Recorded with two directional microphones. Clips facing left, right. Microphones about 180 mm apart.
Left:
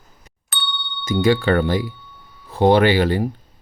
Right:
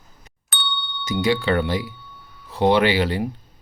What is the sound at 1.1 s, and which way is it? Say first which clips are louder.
Speech: left 4 dB; 50° left (ahead or behind).